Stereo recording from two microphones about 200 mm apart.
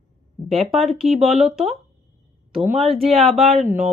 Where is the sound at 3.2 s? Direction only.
Centre (ahead or behind).